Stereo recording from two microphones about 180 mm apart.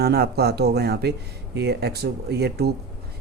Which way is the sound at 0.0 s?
60° right (ahead or behind).